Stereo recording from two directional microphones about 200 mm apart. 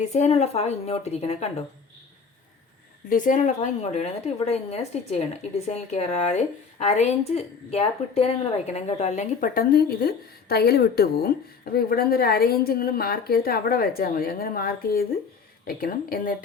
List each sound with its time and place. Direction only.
0.0 s a woman's voice: 35° left (ahead or behind)
3.1 s a woman's voice: 40° left (ahead or behind)